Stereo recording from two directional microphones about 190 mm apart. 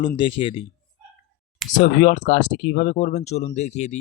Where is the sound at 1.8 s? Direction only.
45° left (ahead or behind).